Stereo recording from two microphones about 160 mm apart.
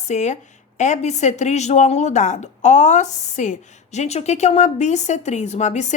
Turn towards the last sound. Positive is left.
turn(degrees=45)  # may be behind; listen again after turning